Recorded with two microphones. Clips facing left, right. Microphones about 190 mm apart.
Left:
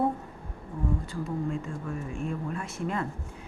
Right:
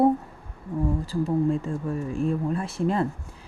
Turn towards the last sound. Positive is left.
turn(degrees=-30)  # may be behind; listen again after turning